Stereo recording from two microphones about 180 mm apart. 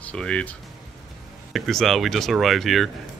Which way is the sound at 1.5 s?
Centre (ahead or behind).